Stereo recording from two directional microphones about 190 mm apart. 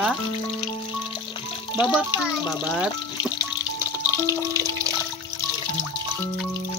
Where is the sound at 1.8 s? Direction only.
5° right (ahead or behind).